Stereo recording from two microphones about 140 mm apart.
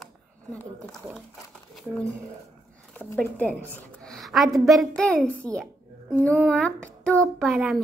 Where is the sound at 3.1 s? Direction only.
10° left (ahead or behind).